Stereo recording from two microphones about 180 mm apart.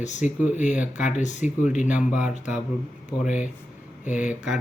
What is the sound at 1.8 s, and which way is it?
Speech, 5° right (ahead or behind).